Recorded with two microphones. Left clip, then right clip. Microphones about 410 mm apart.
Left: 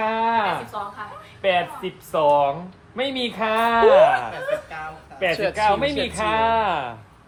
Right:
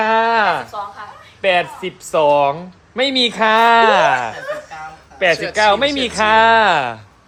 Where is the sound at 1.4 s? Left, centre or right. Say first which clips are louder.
Right 5 dB; right.